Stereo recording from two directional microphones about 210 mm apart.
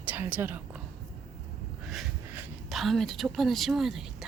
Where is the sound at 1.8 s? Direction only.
Centre (ahead or behind).